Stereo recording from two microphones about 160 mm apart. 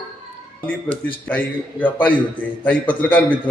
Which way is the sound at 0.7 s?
10° left (ahead or behind).